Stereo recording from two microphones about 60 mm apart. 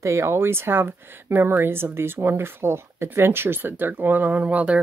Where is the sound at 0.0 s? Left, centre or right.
Right.